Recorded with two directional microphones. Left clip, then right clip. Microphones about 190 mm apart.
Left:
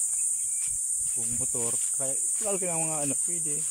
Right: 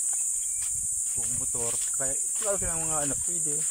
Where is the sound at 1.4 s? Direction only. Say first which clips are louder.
Even; 15° left (ahead or behind).